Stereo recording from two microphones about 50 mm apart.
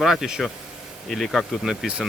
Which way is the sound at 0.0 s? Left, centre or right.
Centre.